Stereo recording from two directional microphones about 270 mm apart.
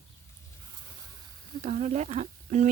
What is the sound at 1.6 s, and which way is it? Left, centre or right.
Speech, right.